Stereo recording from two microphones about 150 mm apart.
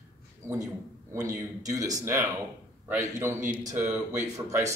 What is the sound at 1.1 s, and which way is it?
Speech, 20° right (ahead or behind).